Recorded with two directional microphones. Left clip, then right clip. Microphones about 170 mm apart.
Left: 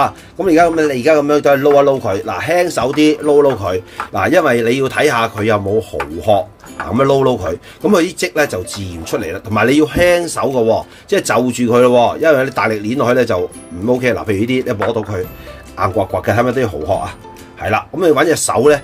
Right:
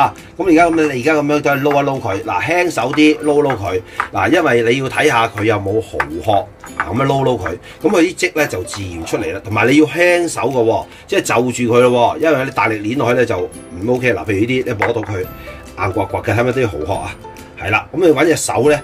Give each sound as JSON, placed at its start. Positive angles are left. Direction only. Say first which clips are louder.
{"t": 0.0, "sound": "a man's voice", "louder": "even", "side_deg": 30}
{"t": 7.1, "sound": "a man's voice", "louder": "left 4 dB", "side_deg": 35}